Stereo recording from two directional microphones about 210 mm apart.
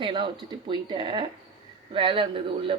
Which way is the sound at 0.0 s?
25° right (ahead or behind).